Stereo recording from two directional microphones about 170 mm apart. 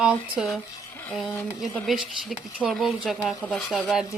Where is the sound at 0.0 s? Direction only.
5° right (ahead or behind).